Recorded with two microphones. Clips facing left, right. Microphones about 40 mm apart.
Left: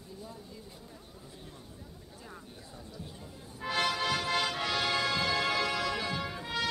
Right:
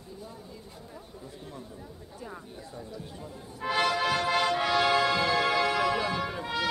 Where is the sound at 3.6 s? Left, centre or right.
Centre.